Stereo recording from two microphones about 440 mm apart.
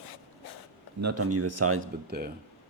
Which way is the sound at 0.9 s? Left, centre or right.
Right.